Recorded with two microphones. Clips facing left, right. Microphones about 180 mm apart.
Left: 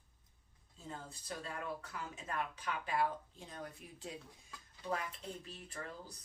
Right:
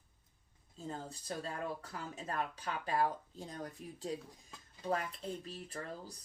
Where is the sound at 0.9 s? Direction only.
40° right (ahead or behind).